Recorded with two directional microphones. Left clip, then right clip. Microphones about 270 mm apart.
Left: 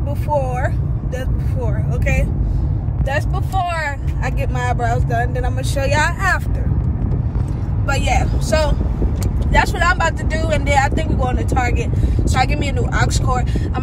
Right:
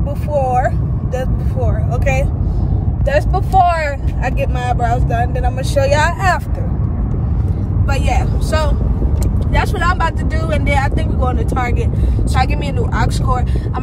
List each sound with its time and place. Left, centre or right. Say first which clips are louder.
0.3 s speech: right 5 dB; centre
7.9 s speech: left 1 dB; centre
12.9 s speech: right 1 dB; centre